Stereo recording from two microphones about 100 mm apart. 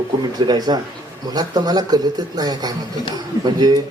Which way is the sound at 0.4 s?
45° right (ahead or behind).